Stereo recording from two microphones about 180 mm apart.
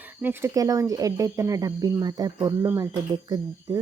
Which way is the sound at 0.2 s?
15° right (ahead or behind).